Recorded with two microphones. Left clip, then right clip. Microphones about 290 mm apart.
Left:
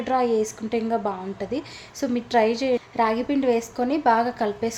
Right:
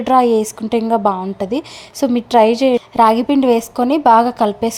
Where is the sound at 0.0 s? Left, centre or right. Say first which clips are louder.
Right 9 dB; right.